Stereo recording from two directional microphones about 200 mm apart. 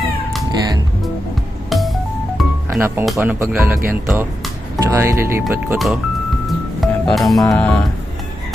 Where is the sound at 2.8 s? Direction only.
10° right (ahead or behind).